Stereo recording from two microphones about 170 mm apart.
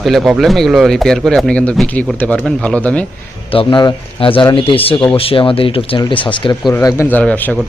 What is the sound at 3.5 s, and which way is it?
A man's voice, 25° left (ahead or behind).